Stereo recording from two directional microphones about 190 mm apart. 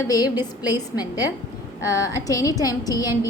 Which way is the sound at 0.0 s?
20° left (ahead or behind).